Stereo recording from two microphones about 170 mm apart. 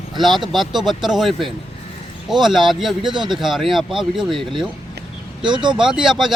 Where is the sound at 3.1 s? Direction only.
25° right (ahead or behind).